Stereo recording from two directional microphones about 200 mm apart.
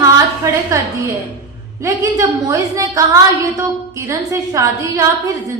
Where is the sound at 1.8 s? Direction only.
15° right (ahead or behind).